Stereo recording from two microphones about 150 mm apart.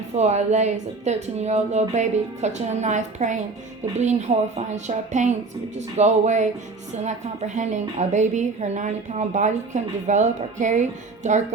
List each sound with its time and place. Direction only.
0.2 s a woman's voice: 50° right (ahead or behind)
4.5 s a woman's voice: 50° right (ahead or behind)